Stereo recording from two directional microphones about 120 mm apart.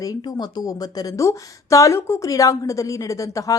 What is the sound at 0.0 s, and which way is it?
Speech, 30° left (ahead or behind).